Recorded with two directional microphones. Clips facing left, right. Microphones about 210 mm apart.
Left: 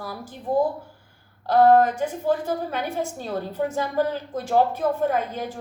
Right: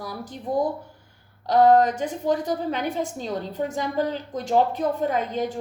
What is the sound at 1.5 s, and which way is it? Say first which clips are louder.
A woman's voice: even; 20° right (ahead or behind).